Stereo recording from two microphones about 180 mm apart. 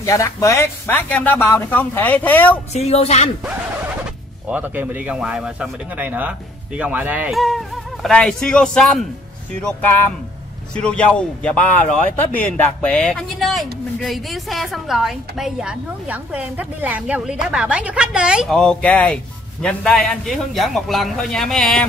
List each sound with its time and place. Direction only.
0.0 s speech: 15° left (ahead or behind)
2.7 s speech: 35° left (ahead or behind)
4.5 s a woman's voice: 10° right (ahead or behind)